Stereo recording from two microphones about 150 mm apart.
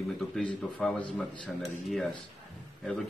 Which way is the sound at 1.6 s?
Centre (ahead or behind).